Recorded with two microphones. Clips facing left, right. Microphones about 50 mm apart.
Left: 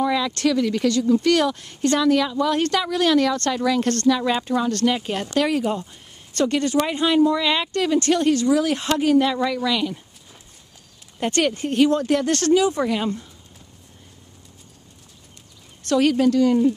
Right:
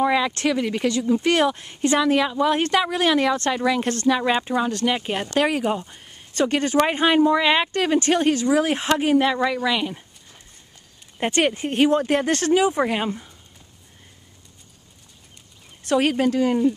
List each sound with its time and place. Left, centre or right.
0.0 s speech: right
11.1 s speech: right
15.9 s speech: right